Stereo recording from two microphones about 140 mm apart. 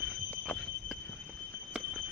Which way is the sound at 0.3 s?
5° left (ahead or behind).